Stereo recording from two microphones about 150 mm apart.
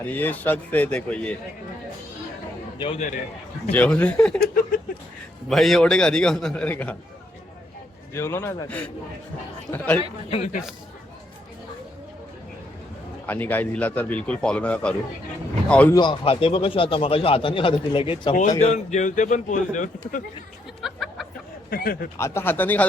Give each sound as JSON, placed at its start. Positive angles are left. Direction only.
{"t": 0.0, "sound": "speech", "side_deg": 10}
{"t": 2.7, "sound": "a man's voice", "side_deg": 35}
{"t": 3.7, "sound": "speech", "side_deg": 10}
{"t": 5.5, "sound": "a man's voice", "side_deg": 0}
{"t": 8.1, "sound": "speech", "side_deg": 15}
{"t": 10.2, "sound": "speech", "side_deg": 40}
{"t": 13.2, "sound": "speech", "side_deg": 10}
{"t": 16.0, "sound": "speech", "side_deg": 35}
{"t": 18.6, "sound": "speech", "side_deg": 50}
{"t": 20.8, "sound": "a sound", "side_deg": 0}
{"t": 21.7, "sound": "speech", "side_deg": 75}
{"t": 22.2, "sound": "speech", "side_deg": 15}